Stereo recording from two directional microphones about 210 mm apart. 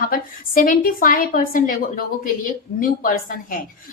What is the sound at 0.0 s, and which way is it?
A woman's voice, 40° left (ahead or behind).